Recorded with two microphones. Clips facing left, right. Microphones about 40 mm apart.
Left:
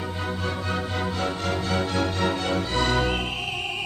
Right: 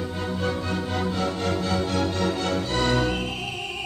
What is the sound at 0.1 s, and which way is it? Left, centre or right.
Music, centre.